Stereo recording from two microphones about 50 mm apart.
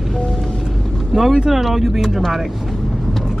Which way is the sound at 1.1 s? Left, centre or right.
Centre.